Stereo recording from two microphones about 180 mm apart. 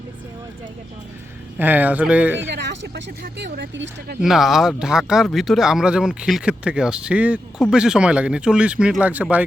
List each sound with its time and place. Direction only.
1.5 s speech: 10° right (ahead or behind)
2.5 s speech: 75° right (ahead or behind)
4.2 s speech: centre (ahead or behind)